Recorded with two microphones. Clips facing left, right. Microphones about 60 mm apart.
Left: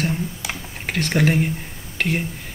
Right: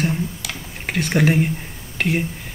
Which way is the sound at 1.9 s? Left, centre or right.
Centre.